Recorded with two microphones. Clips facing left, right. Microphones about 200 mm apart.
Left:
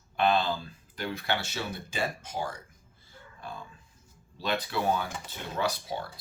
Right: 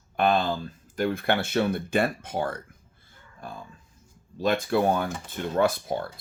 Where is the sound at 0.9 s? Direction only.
50° right (ahead or behind).